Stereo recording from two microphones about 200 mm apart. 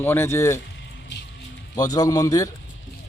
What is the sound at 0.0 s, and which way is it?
Speech, 10° left (ahead or behind).